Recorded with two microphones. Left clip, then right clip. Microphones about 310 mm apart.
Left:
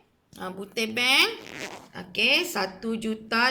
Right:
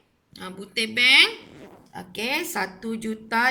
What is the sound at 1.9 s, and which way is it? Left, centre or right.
A woman's voice, centre.